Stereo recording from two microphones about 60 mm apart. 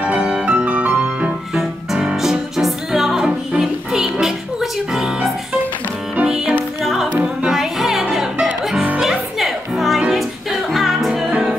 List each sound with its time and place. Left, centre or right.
0.0 s music: centre
1.5 s music: centre